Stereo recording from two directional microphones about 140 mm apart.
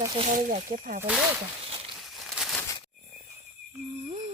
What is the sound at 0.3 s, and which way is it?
Speech, 65° right (ahead or behind).